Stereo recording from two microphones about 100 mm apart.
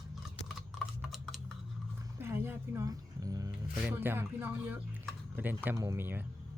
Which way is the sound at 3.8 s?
20° right (ahead or behind).